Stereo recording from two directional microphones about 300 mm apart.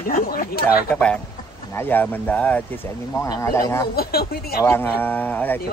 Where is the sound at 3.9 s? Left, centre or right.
Left.